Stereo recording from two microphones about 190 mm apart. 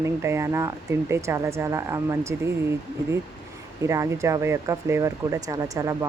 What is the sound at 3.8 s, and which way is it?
Speech, 15° right (ahead or behind).